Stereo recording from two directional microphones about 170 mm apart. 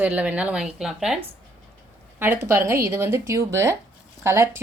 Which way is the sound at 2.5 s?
15° right (ahead or behind).